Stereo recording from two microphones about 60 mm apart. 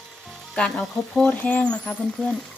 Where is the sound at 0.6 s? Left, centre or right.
Centre.